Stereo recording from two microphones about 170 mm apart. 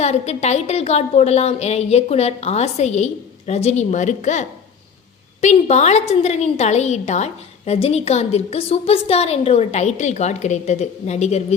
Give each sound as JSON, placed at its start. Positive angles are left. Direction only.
{"t": 0.0, "sound": "a woman's voice", "side_deg": 40}